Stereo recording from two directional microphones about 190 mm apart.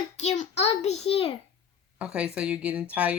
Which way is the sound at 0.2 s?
35° left (ahead or behind).